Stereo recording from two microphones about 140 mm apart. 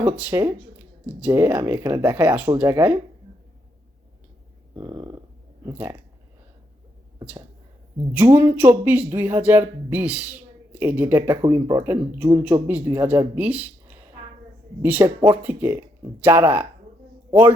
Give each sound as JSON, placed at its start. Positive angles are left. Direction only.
{"t": 0.0, "sound": "speech", "side_deg": -15}
{"t": 4.7, "sound": "a sound", "side_deg": -25}
{"t": 5.7, "sound": "speech", "side_deg": -15}
{"t": 8.1, "sound": "speech", "side_deg": -20}
{"t": 14.8, "sound": "speech", "side_deg": -15}